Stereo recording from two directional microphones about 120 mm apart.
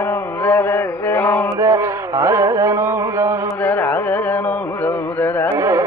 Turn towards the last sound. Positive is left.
turn(degrees=-25)  # may be behind; listen again after turning